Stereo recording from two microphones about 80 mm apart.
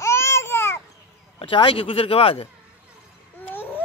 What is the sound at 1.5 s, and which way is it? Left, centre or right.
Speech, left.